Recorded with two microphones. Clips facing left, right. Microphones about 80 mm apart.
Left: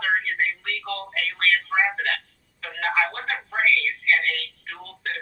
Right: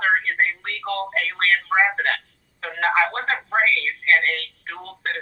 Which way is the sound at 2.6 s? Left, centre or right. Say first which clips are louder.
Right 4 dB; right.